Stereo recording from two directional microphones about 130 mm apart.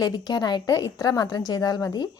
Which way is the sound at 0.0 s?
30° left (ahead or behind).